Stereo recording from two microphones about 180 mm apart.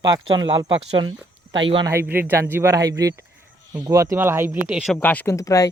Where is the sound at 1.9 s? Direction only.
10° right (ahead or behind).